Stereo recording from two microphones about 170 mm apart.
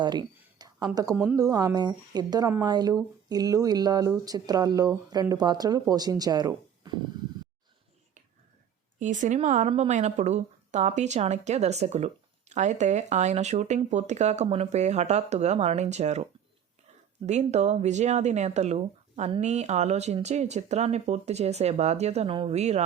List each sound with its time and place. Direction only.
0.0 s a sound: 25° right (ahead or behind)
1.1 s speech: 5° right (ahead or behind)
1.4 s speech: 20° right (ahead or behind)
9.0 s a woman's voice: 45° right (ahead or behind)
17.2 s a woman's voice: 40° right (ahead or behind)